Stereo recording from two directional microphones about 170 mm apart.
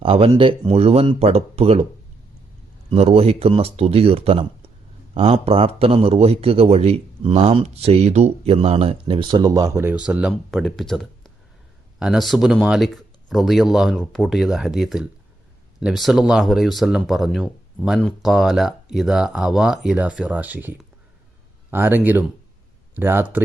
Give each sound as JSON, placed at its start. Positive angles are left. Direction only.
{"t": 0.0, "sound": "speech", "side_deg": -30}
{"t": 2.9, "sound": "speech", "side_deg": -35}